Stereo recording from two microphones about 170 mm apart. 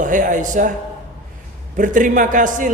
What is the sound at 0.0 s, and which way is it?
Speech, 50° right (ahead or behind).